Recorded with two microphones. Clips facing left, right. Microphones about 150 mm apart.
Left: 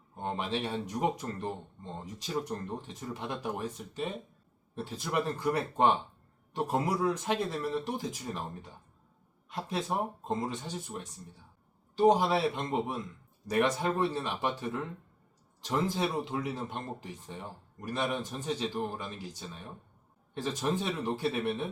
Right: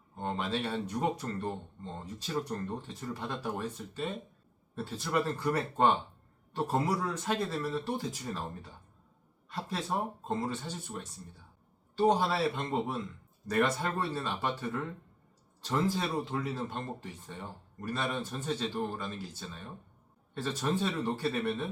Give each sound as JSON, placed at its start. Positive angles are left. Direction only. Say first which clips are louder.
{"t": 0.2, "sound": "speech", "louder": "even", "side_deg": 15}